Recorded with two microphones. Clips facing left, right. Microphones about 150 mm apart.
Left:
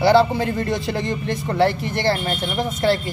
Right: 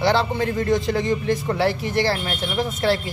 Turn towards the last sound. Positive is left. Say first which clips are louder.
# left 1 dB
turn(degrees=0)  # may be behind; listen again after turning